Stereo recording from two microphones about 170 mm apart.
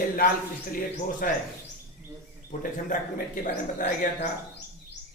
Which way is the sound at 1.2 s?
55° left (ahead or behind).